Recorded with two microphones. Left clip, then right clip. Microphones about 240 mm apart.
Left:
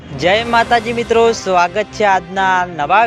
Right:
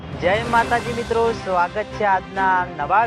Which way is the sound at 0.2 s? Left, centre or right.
Left.